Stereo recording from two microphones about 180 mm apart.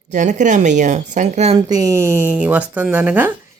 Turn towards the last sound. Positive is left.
turn(degrees=-10)  # may be behind; listen again after turning